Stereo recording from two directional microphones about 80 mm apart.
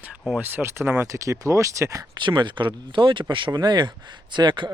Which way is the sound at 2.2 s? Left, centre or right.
Right.